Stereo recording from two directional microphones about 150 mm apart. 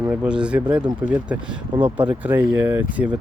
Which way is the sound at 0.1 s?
5° right (ahead or behind).